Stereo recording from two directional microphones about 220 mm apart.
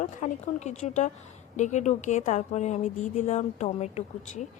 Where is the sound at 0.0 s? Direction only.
35° left (ahead or behind).